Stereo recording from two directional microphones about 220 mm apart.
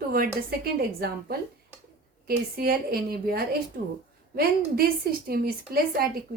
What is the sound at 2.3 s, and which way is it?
A woman's voice, 40° right (ahead or behind).